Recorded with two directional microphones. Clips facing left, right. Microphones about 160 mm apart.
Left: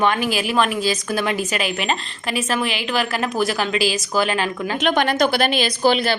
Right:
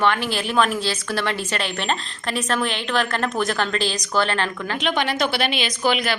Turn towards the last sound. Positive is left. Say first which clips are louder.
# left 4 dB
turn(degrees=30)  # may be behind; listen again after turning